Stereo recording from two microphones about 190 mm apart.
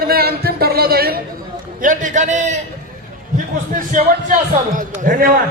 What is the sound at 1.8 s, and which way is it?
Speech, 40° right (ahead or behind).